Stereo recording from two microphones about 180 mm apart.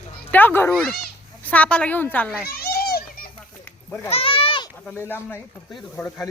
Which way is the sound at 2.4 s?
55° left (ahead or behind).